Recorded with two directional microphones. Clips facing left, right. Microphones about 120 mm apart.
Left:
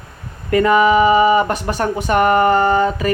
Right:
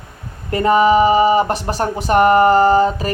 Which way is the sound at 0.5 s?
35° right (ahead or behind).